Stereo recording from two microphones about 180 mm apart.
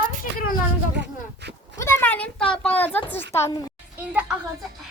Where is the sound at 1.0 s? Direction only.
70° right (ahead or behind).